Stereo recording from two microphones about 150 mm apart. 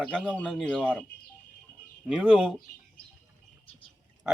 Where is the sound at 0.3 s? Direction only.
5° left (ahead or behind).